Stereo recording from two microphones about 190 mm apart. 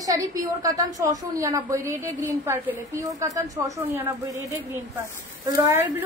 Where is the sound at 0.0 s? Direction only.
20° right (ahead or behind).